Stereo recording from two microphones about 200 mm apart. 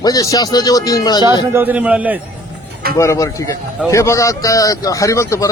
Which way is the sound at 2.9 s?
15° left (ahead or behind).